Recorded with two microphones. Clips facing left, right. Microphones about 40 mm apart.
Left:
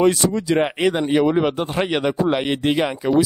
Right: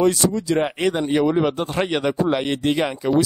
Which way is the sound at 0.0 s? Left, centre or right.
Left.